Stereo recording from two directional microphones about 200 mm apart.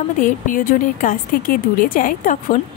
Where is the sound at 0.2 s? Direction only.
40° left (ahead or behind).